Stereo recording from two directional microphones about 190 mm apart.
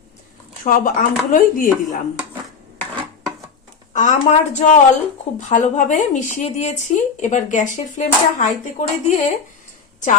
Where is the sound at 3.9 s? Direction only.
40° left (ahead or behind).